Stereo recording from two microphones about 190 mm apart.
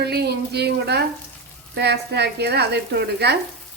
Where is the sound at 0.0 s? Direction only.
60° right (ahead or behind).